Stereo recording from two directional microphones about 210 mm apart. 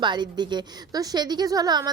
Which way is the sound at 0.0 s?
20° right (ahead or behind).